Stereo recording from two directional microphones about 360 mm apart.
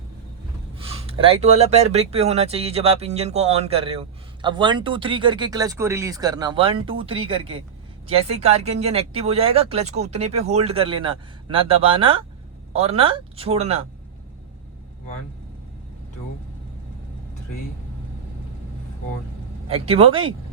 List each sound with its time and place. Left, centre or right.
0.8 s speech: centre
19.6 s speech: centre